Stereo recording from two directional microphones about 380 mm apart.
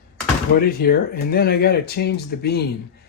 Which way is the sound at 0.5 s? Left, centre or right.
Left.